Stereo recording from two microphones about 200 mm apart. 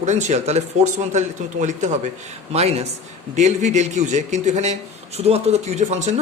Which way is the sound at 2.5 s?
30° right (ahead or behind).